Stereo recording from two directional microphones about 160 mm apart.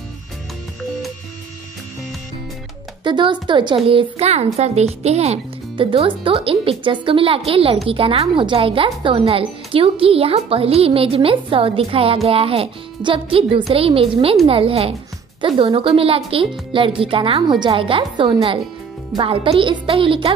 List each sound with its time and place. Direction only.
3.0 s speech: 30° right (ahead or behind)